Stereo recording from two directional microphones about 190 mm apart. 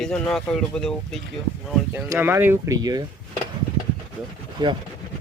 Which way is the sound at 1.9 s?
10° right (ahead or behind).